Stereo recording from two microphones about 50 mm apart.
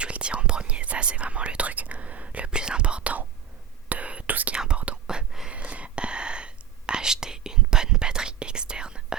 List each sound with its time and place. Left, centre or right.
0.0 s whispering: right
4.5 s whispering: centre
5.5 s whispering: right